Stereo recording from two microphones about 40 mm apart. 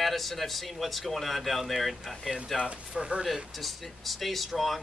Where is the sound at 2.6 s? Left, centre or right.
Right.